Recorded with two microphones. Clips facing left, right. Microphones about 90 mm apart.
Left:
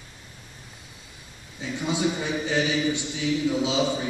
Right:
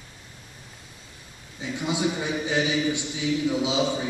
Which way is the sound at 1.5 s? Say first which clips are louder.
Even; 15° right (ahead or behind).